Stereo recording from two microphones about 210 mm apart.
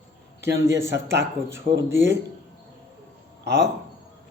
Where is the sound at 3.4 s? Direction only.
55° right (ahead or behind).